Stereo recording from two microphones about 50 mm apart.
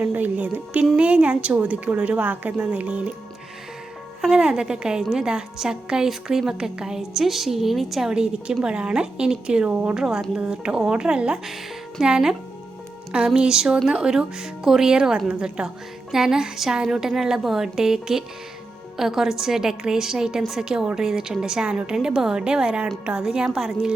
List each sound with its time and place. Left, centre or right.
0.0 s music: right
0.7 s speech: right
4.2 s a woman's voice: centre
6.5 s a woman's voice: centre
8.1 s a woman's voice: centre
9.6 s speech: right
9.9 s a woman's voice: centre